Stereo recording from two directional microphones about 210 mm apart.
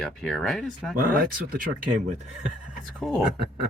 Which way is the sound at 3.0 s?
Centre (ahead or behind).